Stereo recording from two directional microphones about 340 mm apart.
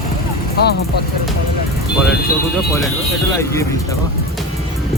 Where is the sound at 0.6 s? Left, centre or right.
Left.